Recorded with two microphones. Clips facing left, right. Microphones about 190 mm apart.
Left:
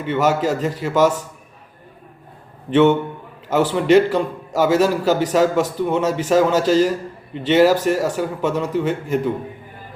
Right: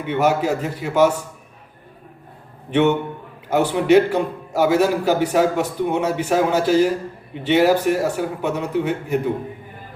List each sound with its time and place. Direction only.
0.1 s a man's voice: 10° right (ahead or behind)
3.5 s a man's voice: 10° right (ahead or behind)
6.2 s speech: 90° left
6.7 s a man's voice: 10° right (ahead or behind)